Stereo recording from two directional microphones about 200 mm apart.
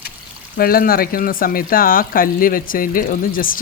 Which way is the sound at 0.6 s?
45° left (ahead or behind).